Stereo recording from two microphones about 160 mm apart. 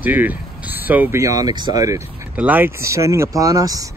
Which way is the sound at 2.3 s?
10° right (ahead or behind).